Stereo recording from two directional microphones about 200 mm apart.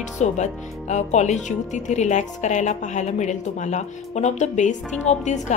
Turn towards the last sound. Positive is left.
turn(degrees=35)  # may be behind; listen again after turning